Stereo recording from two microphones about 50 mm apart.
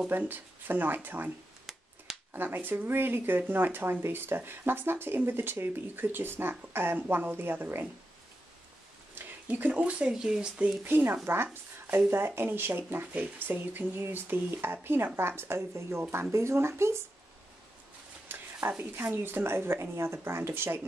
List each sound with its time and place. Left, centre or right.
0.3 s speech: right
2.3 s speech: right
9.5 s speech: right
10.1 s speech: centre
10.8 s speech: right
18.3 s speech: right